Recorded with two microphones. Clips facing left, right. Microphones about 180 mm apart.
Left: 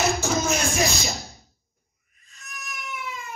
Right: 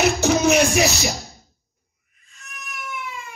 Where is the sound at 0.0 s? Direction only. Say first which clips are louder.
Right 6 dB; 70° right (ahead or behind).